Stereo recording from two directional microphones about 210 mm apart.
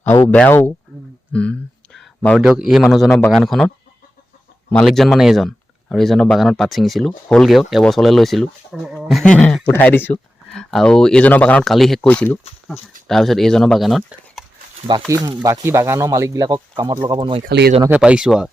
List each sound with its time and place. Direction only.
0.3 s speech: 10° left (ahead or behind)
1.3 s a sound: 5° left (ahead or behind)
2.5 s speech: 5° right (ahead or behind)
3.1 s speech: 15° left (ahead or behind)
3.3 s speech: centre (ahead or behind)
4.7 s speech: centre (ahead or behind)
15.0 s speech: 15° right (ahead or behind)
17.4 s speech: 45° right (ahead or behind)
17.8 s speech: 5° right (ahead or behind)